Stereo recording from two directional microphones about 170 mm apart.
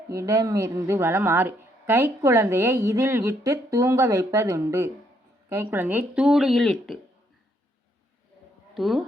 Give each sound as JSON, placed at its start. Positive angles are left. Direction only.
{"t": 0.1, "sound": "a woman's voice", "side_deg": -20}
{"t": 8.7, "sound": "a woman's voice", "side_deg": 0}